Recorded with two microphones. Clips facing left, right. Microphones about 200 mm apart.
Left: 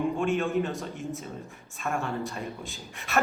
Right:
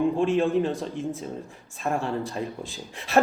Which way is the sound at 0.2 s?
30° right (ahead or behind).